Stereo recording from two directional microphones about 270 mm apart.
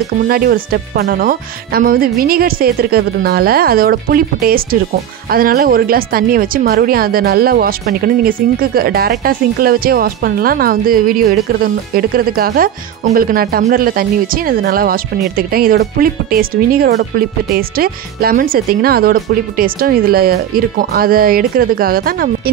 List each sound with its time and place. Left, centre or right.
0.3 s speech: right